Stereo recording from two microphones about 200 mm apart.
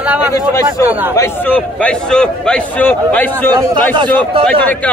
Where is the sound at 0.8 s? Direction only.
10° right (ahead or behind).